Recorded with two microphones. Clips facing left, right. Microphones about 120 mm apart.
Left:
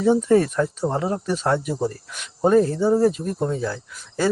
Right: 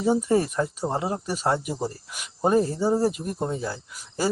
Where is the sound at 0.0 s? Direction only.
10° right (ahead or behind).